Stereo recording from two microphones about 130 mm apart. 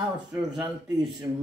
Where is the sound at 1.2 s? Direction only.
35° right (ahead or behind).